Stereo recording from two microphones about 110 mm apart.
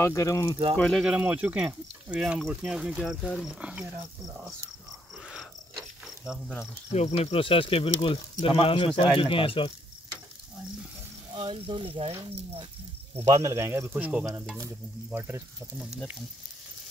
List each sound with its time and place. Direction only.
0.0 s speech: 25° left (ahead or behind)
0.8 s speech: 5° left (ahead or behind)
1.2 s speech: 15° right (ahead or behind)
5.2 s cricket: centre (ahead or behind)
6.9 s cricket: 75° left (ahead or behind)
7.2 s speech: 55° left (ahead or behind)
11.3 s speech: 55° right (ahead or behind)
13.2 s speech: 30° right (ahead or behind)